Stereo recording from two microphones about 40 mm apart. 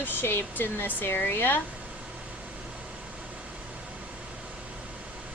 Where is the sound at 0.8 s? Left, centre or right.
Left.